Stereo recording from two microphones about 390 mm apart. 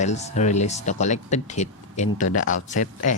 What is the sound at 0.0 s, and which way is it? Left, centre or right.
Speech, centre.